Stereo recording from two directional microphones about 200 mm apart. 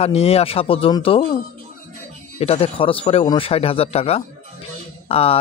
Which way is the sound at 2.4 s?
30° left (ahead or behind).